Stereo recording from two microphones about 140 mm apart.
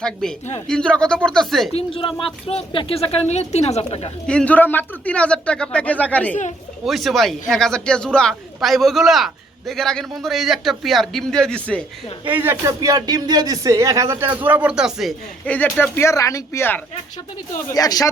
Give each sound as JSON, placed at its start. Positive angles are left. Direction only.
{"t": 0.0, "sound": "a woman's voice", "side_deg": 5}
{"t": 1.7, "sound": "speech", "side_deg": 40}
{"t": 4.3, "sound": "a man's voice", "side_deg": 10}
{"t": 6.8, "sound": "a woman's voice", "side_deg": 0}
{"t": 12.3, "sound": "speech", "side_deg": -15}
{"t": 15.4, "sound": "a man's voice", "side_deg": 10}
{"t": 17.7, "sound": "speech", "side_deg": 25}